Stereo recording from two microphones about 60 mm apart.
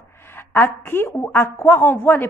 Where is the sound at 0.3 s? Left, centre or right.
Left.